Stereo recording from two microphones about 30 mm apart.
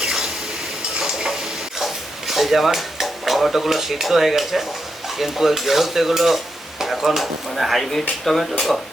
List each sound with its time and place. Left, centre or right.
0.0 s stir: right
1.8 s stir: centre
7.2 s speech: centre